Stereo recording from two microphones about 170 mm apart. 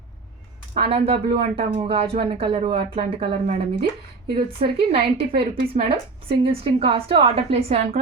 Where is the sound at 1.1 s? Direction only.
35° right (ahead or behind).